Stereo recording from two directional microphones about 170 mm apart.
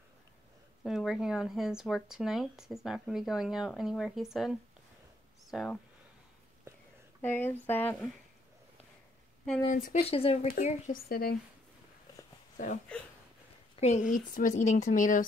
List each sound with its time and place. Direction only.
0.8 s speech: centre (ahead or behind)
7.2 s speech: 10° left (ahead or behind)
9.7 s speech: 55° left (ahead or behind)
10.0 s speech: 35° left (ahead or behind)
10.5 s speech: 55° left (ahead or behind)
12.9 s speech: 5° left (ahead or behind)
13.7 s a woman's voice: 40° left (ahead or behind)
14.1 s speech: 50° left (ahead or behind)